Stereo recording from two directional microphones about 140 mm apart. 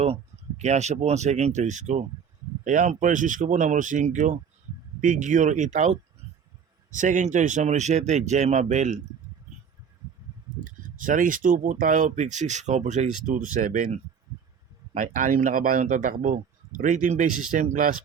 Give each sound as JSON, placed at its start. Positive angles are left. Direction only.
{"t": 0.0, "sound": "speech", "side_deg": -50}
{"t": 10.6, "sound": "speech", "side_deg": -70}